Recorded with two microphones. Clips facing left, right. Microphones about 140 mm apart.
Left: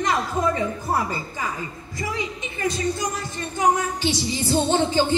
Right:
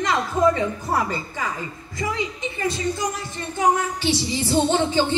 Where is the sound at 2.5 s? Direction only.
25° right (ahead or behind).